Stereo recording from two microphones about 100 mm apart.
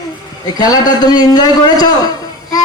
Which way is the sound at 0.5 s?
40° left (ahead or behind).